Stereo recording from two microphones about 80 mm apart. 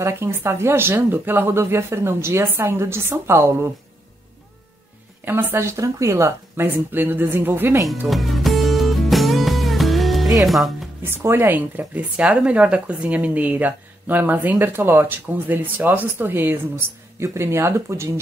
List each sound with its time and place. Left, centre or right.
0.0 s speech: right
5.2 s speech: right
8.1 s music: centre
10.4 s speech: centre
11.1 s speech: right